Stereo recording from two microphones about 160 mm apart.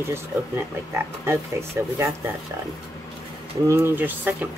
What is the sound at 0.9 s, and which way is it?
Speech, 15° right (ahead or behind).